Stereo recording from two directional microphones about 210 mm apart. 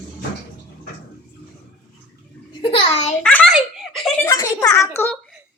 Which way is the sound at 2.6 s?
25° left (ahead or behind).